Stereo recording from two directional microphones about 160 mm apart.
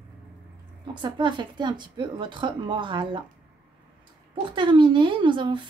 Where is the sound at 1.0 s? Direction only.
30° right (ahead or behind).